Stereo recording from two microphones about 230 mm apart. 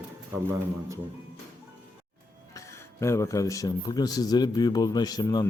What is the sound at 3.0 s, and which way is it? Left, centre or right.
A man's voice, centre.